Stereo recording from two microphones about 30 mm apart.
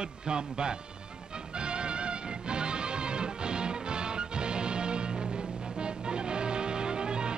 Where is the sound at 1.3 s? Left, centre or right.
Right.